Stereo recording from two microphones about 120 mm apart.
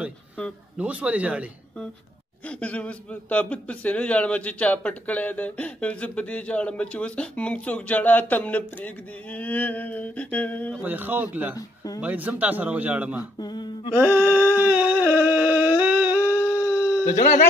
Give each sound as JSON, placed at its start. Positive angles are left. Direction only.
{"t": 0.7, "sound": "a man's voice", "side_deg": -10}
{"t": 2.4, "sound": "speech", "side_deg": 10}
{"t": 10.8, "sound": "a man's voice", "side_deg": -15}
{"t": 11.5, "sound": "speech", "side_deg": 30}
{"t": 12.0, "sound": "a man's voice", "side_deg": -15}
{"t": 13.4, "sound": "speech", "side_deg": 35}
{"t": 13.9, "sound": "a sound", "side_deg": -15}